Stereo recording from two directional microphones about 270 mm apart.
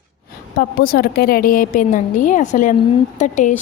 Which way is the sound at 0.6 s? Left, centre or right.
Left.